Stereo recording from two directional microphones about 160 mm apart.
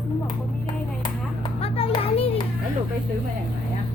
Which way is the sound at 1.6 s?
35° left (ahead or behind).